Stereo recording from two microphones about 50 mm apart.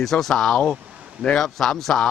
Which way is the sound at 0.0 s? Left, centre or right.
Centre.